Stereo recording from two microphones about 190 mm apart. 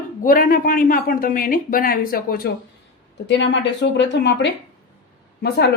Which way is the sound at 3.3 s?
65° left (ahead or behind).